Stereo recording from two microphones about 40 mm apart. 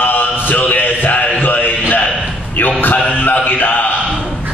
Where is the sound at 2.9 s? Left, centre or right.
Left.